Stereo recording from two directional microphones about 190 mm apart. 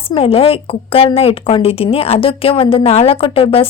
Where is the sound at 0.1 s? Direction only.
30° left (ahead or behind).